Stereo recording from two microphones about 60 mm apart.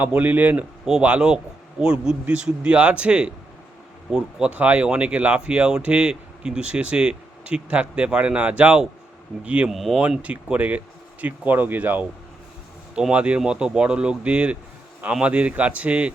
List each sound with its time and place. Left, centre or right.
0.0 s speech: right
1.0 s speech: centre
4.4 s speech: right
9.6 s speech: centre
10.0 s speech: right
12.9 s speech: centre